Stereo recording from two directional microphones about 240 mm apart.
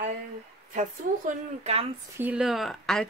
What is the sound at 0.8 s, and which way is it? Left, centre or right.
Speech, right.